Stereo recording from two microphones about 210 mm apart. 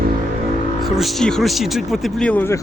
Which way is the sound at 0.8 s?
Centre (ahead or behind).